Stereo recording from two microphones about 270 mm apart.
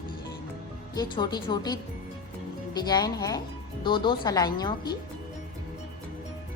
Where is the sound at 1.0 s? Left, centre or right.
Centre.